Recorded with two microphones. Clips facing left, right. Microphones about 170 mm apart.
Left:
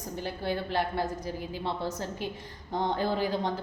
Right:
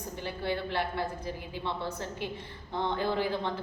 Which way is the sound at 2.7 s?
40° left (ahead or behind).